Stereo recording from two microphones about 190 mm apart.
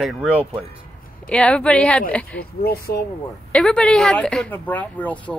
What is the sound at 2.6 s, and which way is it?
Speech, 55° left (ahead or behind).